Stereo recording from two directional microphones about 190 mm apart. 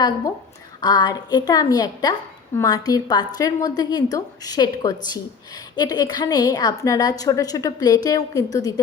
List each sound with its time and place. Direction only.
0.8 s a woman's voice: 20° left (ahead or behind)